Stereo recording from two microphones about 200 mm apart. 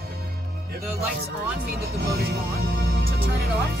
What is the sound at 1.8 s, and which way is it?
Speech, 50° right (ahead or behind).